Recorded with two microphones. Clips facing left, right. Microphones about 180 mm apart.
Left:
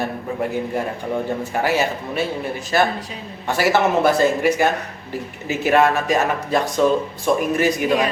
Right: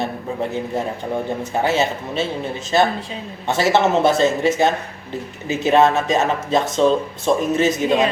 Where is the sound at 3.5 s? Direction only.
25° right (ahead or behind).